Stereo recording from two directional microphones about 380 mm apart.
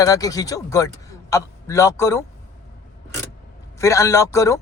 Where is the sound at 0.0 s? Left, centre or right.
Centre.